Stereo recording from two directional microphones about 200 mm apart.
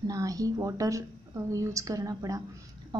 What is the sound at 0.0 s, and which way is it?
A woman's voice, 15° right (ahead or behind).